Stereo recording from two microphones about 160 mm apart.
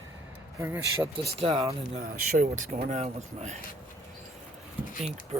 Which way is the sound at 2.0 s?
65° right (ahead or behind).